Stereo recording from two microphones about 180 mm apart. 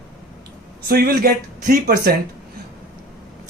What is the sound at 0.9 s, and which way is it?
Speech, 55° right (ahead or behind).